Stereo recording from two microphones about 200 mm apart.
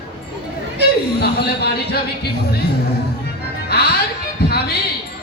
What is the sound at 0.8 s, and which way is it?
Chatter, 55° left (ahead or behind).